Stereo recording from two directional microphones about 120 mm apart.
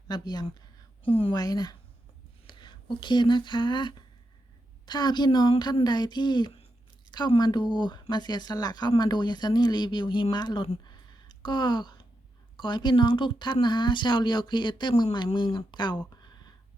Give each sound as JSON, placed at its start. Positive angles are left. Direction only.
{"t": 0.1, "sound": "speech", "side_deg": 35}
{"t": 1.0, "sound": "a woman's voice", "side_deg": 50}
{"t": 1.3, "sound": "speech", "side_deg": 30}
{"t": 10.8, "sound": "a sound", "side_deg": 35}
{"t": 12.5, "sound": "speech", "side_deg": 40}